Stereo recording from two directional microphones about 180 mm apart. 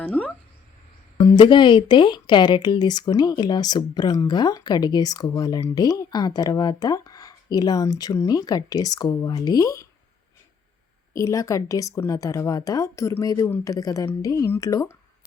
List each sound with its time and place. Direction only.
0.0 s a sound: 5° left (ahead or behind)
1.4 s speech: 25° left (ahead or behind)
11.1 s speech: 15° left (ahead or behind)